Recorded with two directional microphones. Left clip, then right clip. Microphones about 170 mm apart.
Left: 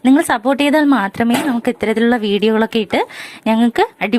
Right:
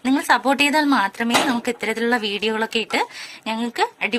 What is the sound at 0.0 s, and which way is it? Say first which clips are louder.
Speech: left 4 dB; 25° left (ahead or behind).